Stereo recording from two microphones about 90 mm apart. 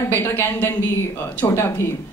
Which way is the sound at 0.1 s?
25° left (ahead or behind).